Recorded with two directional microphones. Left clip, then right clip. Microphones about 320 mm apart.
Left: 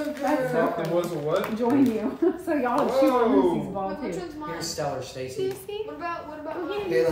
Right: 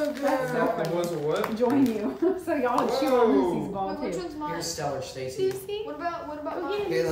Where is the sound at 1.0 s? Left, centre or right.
Centre.